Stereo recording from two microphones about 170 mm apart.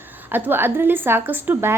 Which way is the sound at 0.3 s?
10° right (ahead or behind).